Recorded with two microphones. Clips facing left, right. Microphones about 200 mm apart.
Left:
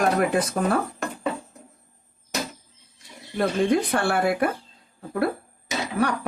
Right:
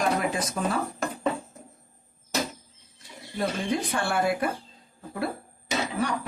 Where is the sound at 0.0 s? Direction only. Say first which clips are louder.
Left 5 dB; 60° left (ahead or behind).